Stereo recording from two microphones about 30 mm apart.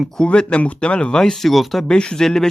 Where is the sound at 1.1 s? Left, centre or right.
Left.